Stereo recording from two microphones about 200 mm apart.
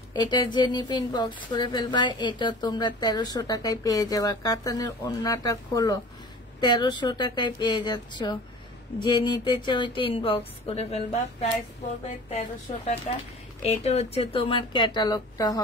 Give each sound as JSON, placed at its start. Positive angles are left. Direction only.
{"t": 0.1, "sound": "a woman's voice", "side_deg": 20}